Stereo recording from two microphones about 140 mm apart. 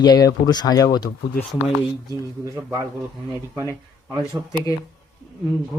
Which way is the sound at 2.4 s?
20° right (ahead or behind).